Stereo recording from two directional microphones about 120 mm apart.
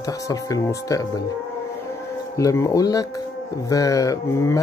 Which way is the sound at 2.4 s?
25° left (ahead or behind).